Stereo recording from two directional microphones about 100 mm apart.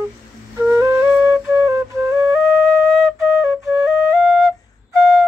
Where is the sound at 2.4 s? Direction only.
5° left (ahead or behind).